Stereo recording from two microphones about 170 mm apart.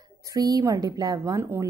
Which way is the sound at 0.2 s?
20° right (ahead or behind).